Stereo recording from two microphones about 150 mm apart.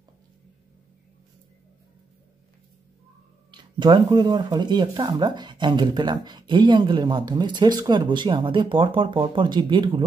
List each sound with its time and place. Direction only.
3.5 s speech: 30° right (ahead or behind)